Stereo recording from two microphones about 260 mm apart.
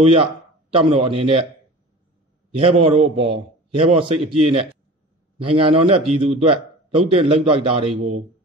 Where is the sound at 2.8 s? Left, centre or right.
Right.